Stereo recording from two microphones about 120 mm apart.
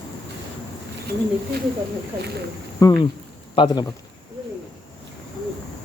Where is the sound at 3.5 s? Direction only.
40° left (ahead or behind).